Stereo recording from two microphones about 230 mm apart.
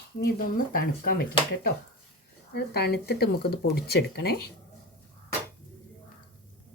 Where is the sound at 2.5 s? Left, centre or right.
Left.